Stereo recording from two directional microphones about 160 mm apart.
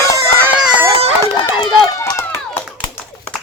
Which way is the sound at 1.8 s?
25° left (ahead or behind).